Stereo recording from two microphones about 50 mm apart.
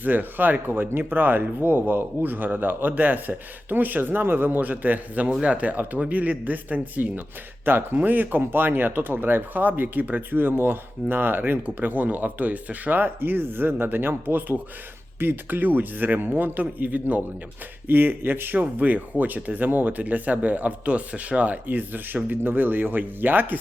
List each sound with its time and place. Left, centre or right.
0.0 s speech: right
7.6 s speech: right
18.6 s speech: right